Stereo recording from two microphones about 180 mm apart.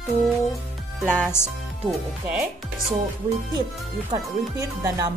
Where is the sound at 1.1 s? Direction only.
10° left (ahead or behind).